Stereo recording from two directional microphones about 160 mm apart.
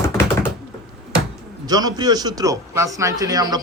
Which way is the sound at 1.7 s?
25° right (ahead or behind).